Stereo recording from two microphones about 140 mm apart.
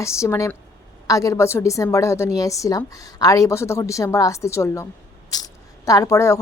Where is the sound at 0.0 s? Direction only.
20° left (ahead or behind).